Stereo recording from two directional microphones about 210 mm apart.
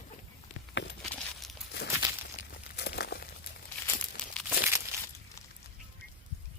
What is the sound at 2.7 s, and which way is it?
Crumpling, 50° left (ahead or behind).